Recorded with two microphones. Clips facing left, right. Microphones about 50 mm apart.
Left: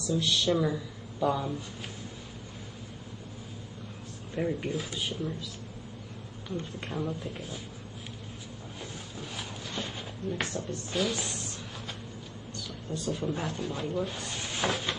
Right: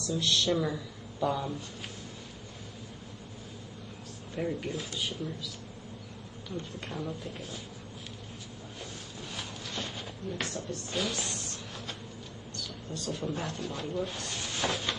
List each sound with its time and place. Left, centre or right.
0.0 s speech: centre
4.4 s speech: centre
6.5 s speech: centre
9.3 s a sound: centre
10.3 s speech: left
10.9 s speech: centre
12.6 s speech: centre